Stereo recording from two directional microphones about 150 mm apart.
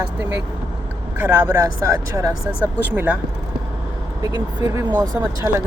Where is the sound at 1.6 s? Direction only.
20° right (ahead or behind).